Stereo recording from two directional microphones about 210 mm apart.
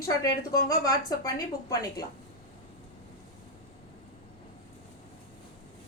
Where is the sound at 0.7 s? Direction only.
15° left (ahead or behind).